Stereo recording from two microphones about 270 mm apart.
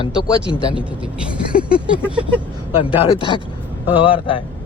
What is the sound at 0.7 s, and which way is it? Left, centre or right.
Speech, centre.